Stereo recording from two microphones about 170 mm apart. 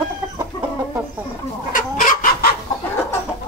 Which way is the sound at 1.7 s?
55° left (ahead or behind).